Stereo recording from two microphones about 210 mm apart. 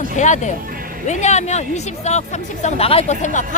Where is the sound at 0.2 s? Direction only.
35° left (ahead or behind).